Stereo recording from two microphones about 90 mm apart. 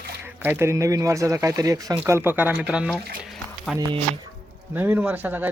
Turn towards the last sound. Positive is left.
turn(degrees=-20)  # may be behind; listen again after turning